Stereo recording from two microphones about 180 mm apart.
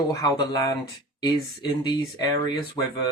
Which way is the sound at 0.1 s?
20° left (ahead or behind).